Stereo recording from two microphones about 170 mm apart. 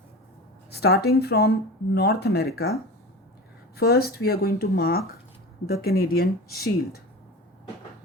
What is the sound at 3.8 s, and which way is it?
Speech, 65° left (ahead or behind).